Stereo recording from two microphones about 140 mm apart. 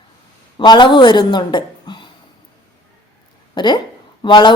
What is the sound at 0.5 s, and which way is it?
Speech, 35° left (ahead or behind).